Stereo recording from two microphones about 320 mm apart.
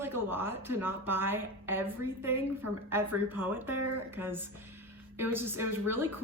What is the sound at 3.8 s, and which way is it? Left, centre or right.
Speech, right.